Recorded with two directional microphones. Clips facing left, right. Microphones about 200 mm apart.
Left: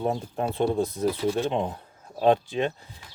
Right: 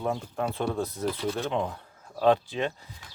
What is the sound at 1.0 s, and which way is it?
Speech, 10° left (ahead or behind).